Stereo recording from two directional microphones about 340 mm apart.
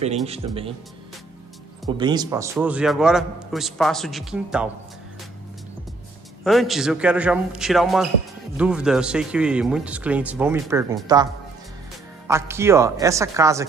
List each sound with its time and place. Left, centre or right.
0.0 s speech: centre
2.0 s a man's voice: centre
6.4 s a man's voice: centre
12.3 s speech: centre